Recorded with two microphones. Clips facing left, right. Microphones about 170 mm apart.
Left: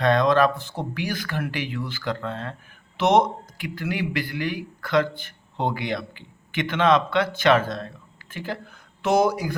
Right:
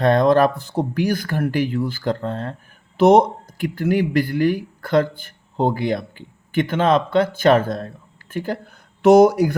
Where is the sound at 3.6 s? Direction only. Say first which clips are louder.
Right 9 dB; 50° right (ahead or behind).